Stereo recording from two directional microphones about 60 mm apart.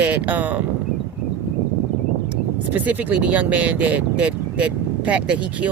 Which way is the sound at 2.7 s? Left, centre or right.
Right.